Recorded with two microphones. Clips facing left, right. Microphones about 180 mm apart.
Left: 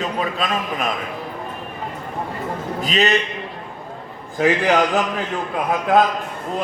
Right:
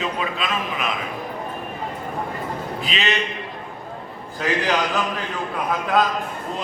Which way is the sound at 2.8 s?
40° left (ahead or behind).